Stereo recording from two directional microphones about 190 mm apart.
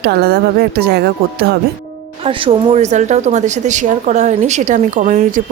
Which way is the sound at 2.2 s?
30° right (ahead or behind).